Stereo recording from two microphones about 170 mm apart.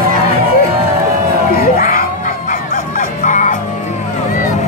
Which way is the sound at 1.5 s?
55° left (ahead or behind).